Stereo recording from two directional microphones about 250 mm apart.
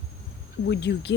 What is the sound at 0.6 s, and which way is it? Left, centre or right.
Speech, left.